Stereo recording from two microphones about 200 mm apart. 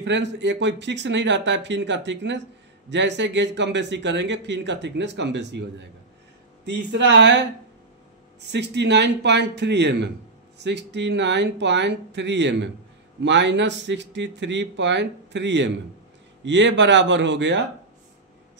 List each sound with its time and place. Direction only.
0.0 s speech: 65° right (ahead or behind)
8.5 s speech: 60° right (ahead or behind)